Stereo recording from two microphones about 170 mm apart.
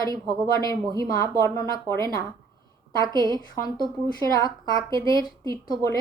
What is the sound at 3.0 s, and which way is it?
Speech, 25° right (ahead or behind).